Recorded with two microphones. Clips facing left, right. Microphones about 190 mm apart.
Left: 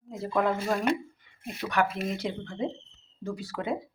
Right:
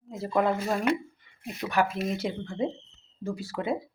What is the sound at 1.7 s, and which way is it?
Speech, centre (ahead or behind).